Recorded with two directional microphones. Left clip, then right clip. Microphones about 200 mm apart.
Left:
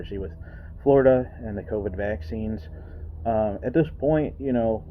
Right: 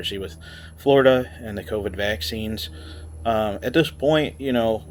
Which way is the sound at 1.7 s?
10° right (ahead or behind).